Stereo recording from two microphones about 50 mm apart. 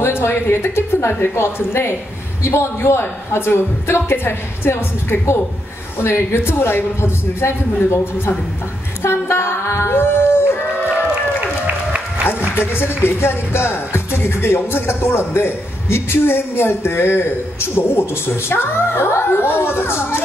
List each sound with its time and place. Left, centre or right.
0.0 s a woman's voice: left
9.0 s a sound: left
11.4 s applause: right
12.5 s music: left